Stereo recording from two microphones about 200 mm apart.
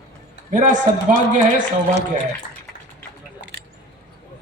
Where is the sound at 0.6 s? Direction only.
40° right (ahead or behind).